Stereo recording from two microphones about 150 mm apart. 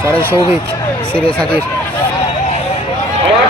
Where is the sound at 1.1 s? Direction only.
5° left (ahead or behind).